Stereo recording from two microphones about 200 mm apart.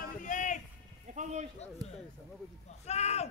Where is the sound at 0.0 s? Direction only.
40° left (ahead or behind).